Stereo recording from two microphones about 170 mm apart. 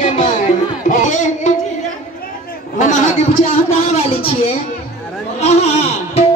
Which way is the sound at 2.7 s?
45° left (ahead or behind).